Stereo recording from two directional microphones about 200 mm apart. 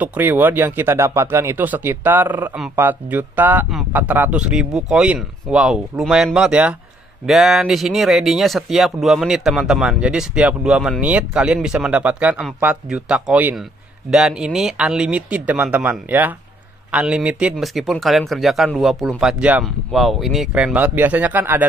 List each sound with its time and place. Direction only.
0.0 s speech: 10° right (ahead or behind)